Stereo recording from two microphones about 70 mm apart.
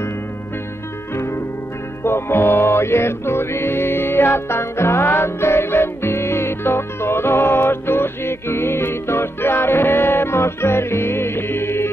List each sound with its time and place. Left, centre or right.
2.0 s music: left